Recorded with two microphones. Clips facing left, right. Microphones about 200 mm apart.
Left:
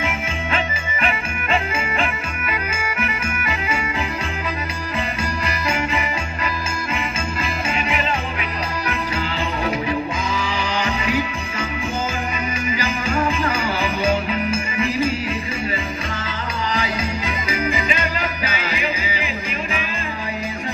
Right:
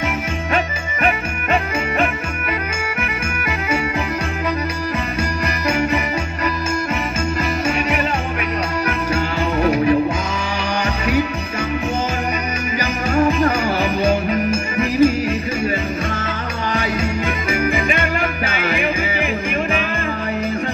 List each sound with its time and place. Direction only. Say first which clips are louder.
5.7 s music: right 5 dB; 40° right (ahead or behind)
7.6 s music: right 3 dB; 45° right (ahead or behind)
12.7 s music: right 6 dB; 40° right (ahead or behind)
16.7 s music: right 5 dB; 50° right (ahead or behind)